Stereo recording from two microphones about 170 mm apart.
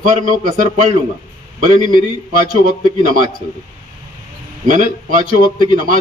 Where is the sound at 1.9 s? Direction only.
50° right (ahead or behind).